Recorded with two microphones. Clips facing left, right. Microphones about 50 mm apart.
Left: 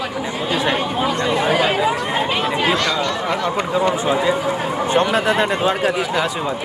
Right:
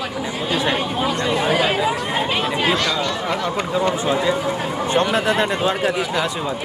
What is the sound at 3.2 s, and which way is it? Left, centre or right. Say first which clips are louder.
Speech: left 2 dB; centre.